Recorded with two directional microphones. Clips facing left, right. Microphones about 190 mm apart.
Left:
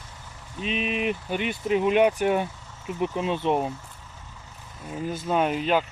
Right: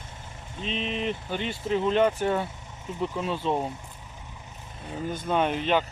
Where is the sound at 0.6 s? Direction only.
15° left (ahead or behind).